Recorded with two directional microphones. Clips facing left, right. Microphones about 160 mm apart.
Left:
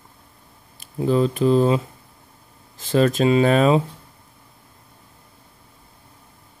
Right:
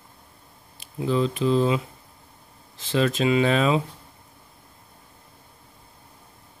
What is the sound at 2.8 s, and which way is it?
Speech, 45° left (ahead or behind).